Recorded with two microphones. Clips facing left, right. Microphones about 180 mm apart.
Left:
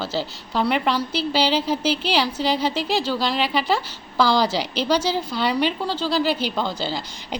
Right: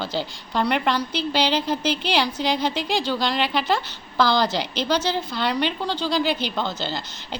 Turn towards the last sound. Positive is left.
turn(degrees=10)  # may be behind; listen again after turning